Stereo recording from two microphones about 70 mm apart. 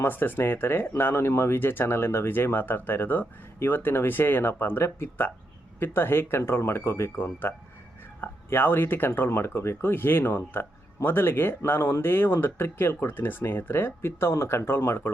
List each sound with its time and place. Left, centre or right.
0.0 s speech: left